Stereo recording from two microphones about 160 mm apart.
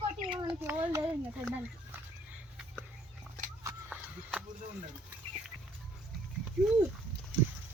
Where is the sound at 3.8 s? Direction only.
5° right (ahead or behind).